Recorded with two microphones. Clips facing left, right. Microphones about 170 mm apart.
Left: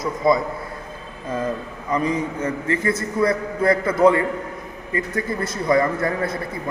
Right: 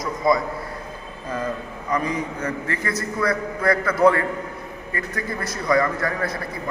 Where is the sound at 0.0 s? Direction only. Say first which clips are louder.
Left 2 dB; 25° left (ahead or behind).